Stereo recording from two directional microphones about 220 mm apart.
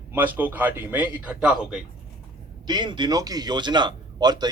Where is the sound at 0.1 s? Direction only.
10° right (ahead or behind).